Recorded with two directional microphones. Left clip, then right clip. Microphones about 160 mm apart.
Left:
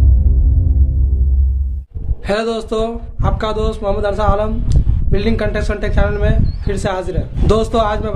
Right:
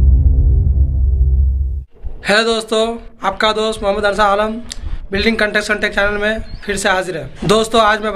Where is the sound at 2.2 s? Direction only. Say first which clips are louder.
Right 4 dB; 5° left (ahead or behind).